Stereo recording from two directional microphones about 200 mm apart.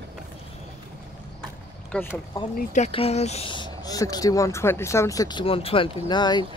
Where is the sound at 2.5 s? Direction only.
35° left (ahead or behind).